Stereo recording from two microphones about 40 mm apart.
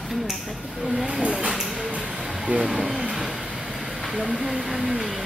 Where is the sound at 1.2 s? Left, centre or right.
Centre.